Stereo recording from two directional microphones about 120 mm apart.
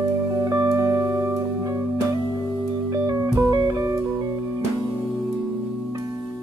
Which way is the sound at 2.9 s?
25° right (ahead or behind).